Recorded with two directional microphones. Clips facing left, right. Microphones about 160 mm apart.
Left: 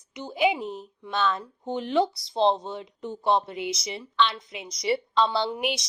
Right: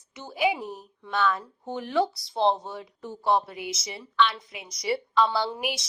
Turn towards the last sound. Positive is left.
turn(degrees=20)  # may be behind; listen again after turning